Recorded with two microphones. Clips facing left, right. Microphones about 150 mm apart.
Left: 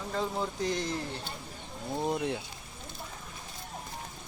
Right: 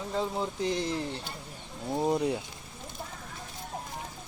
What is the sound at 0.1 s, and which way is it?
Speech, 15° right (ahead or behind).